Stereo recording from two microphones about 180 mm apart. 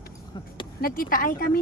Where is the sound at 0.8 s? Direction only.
50° left (ahead or behind).